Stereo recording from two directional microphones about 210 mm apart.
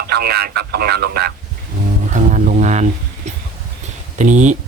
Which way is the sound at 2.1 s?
35° right (ahead or behind).